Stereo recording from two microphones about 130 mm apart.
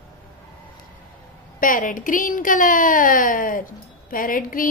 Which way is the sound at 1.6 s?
90° left.